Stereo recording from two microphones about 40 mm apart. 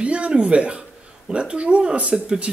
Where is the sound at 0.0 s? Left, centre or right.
Right.